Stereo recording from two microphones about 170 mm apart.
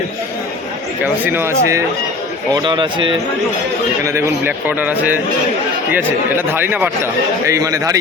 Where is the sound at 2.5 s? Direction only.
25° right (ahead or behind).